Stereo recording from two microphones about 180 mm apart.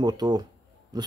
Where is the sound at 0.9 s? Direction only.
20° right (ahead or behind).